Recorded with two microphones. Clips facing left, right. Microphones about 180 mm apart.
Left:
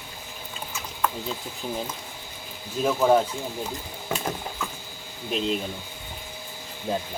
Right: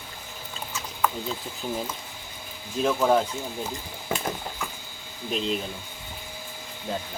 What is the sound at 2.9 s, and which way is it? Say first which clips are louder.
Speech: left 2 dB; 5° left (ahead or behind).